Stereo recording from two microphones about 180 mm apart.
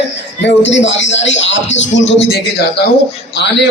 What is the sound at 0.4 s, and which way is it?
Speech, 85° left.